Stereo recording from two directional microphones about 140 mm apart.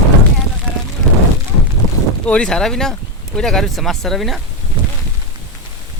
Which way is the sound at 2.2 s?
10° left (ahead or behind).